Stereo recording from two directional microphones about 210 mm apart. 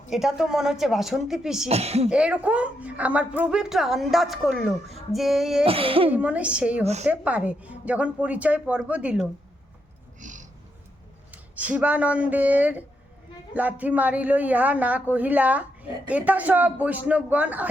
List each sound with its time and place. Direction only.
0.1 s a woman's voice: centre (ahead or behind)
1.7 s speech: 30° right (ahead or behind)
2.0 s a woman's voice: 5° right (ahead or behind)
5.6 s speech: 25° right (ahead or behind)
6.1 s a woman's voice: 5° right (ahead or behind)
6.8 s speech: 30° right (ahead or behind)
7.1 s a woman's voice: 5° right (ahead or behind)
10.2 s a sound: 35° right (ahead or behind)
11.7 s a woman's voice: 5° right (ahead or behind)